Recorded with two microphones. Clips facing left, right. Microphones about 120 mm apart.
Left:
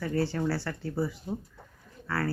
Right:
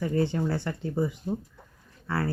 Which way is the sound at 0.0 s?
20° right (ahead or behind).